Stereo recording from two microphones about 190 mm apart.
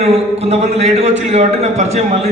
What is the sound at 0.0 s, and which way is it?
A man's voice, 35° right (ahead or behind).